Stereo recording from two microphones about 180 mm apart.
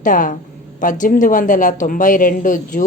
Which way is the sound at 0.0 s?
45° left (ahead or behind).